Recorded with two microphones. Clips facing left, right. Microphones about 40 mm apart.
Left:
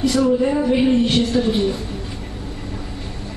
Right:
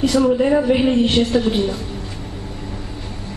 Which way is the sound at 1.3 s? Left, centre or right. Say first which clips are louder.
Right 1 dB; centre.